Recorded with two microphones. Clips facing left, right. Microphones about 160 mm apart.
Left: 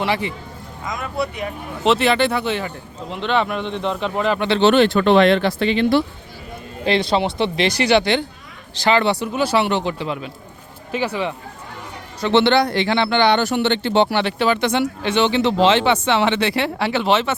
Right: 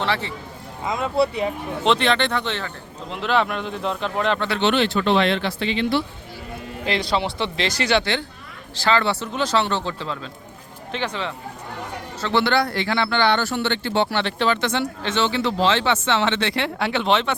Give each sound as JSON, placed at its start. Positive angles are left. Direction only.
{"t": 0.0, "sound": "speech", "side_deg": 15}
{"t": 0.9, "sound": "speech", "side_deg": -25}
{"t": 1.8, "sound": "speech", "side_deg": 5}
{"t": 3.1, "sound": "a man's voice", "side_deg": 0}
{"t": 4.4, "sound": "speech", "side_deg": 25}
{"t": 4.7, "sound": "speech", "side_deg": 50}
{"t": 6.8, "sound": "speech", "side_deg": 25}
{"t": 12.2, "sound": "speech", "side_deg": 25}